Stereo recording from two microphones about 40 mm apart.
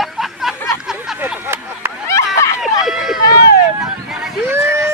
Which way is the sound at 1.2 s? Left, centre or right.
Right.